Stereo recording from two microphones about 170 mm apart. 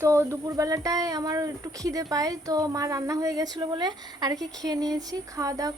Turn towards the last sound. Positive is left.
turn(degrees=-20)  # may be behind; listen again after turning